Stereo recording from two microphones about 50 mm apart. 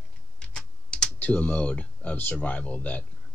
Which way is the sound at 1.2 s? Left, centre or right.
Left.